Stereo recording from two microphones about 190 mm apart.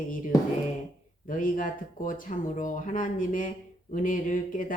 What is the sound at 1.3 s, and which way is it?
Speech, 45° left (ahead or behind).